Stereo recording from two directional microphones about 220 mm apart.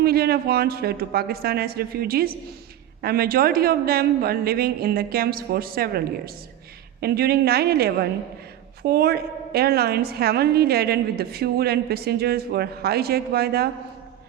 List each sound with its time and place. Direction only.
0.0 s a woman's voice: 45° right (ahead or behind)